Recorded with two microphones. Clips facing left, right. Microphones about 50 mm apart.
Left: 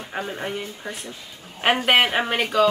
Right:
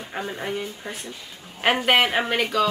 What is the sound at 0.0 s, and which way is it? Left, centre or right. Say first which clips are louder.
Speech: left 1 dB; centre.